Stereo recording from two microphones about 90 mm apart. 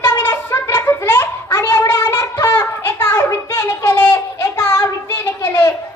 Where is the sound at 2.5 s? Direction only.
30° left (ahead or behind).